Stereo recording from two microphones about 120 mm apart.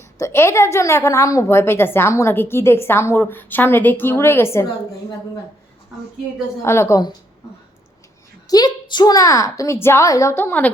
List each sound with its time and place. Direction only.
0.2 s a woman's voice: 20° left (ahead or behind)
6.6 s a woman's voice: 25° left (ahead or behind)
8.4 s a woman's voice: 35° left (ahead or behind); by 10.7 s 15° left (ahead or behind)